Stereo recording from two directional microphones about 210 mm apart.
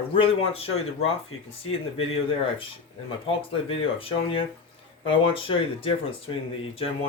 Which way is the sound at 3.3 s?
25° left (ahead or behind).